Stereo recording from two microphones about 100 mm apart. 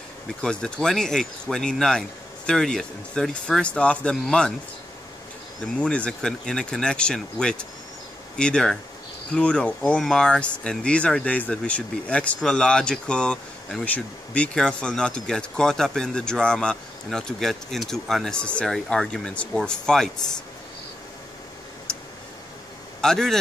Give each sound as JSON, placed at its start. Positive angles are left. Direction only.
{"t": 0.4, "sound": "speech", "side_deg": 10}
{"t": 5.8, "sound": "speech", "side_deg": 10}
{"t": 22.9, "sound": "a man's voice", "side_deg": 5}